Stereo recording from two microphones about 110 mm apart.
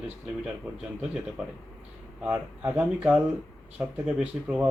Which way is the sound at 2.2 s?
15° right (ahead or behind).